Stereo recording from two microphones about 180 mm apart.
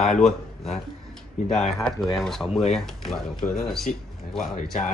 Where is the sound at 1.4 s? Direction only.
40° left (ahead or behind).